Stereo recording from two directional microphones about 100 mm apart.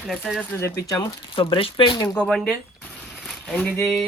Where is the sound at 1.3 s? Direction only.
60° left (ahead or behind).